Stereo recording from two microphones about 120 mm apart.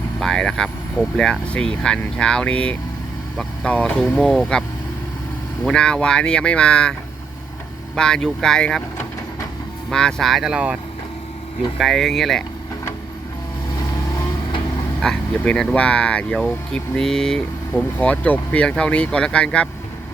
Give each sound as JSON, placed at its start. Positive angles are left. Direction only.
{"t": 0.2, "sound": "speech", "side_deg": 5}
{"t": 5.6, "sound": "speech", "side_deg": 10}
{"t": 7.9, "sound": "speech", "side_deg": 5}
{"t": 9.9, "sound": "speech", "side_deg": 5}
{"t": 11.8, "sound": "speech", "side_deg": 0}
{"t": 13.7, "sound": "vehicle", "side_deg": 30}
{"t": 15.0, "sound": "speech", "side_deg": 5}